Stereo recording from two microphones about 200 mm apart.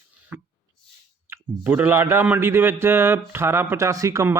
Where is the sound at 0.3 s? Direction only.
10° right (ahead or behind).